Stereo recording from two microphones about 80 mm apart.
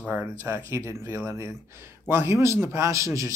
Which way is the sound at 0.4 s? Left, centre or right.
Right.